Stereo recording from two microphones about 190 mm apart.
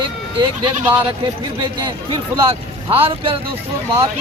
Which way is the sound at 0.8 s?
10° right (ahead or behind).